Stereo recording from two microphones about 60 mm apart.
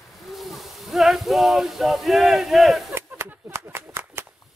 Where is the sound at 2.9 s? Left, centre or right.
Right.